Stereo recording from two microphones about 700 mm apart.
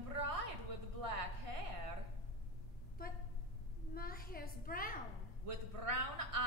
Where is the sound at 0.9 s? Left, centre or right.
Right.